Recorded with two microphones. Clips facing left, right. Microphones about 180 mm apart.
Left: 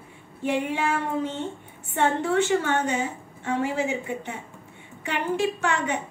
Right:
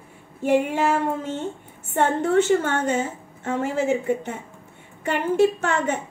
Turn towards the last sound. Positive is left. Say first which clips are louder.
# right 3 dB
turn(degrees=-45)  # may be behind; listen again after turning